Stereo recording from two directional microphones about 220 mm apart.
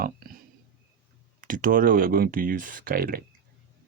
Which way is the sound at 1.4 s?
40° right (ahead or behind).